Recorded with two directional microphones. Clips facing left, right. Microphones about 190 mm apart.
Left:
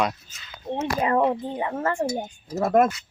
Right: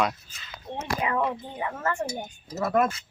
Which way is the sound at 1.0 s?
35° left (ahead or behind).